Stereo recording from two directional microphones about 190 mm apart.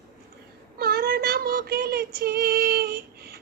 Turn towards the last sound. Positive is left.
turn(degrees=-55)  # may be behind; listen again after turning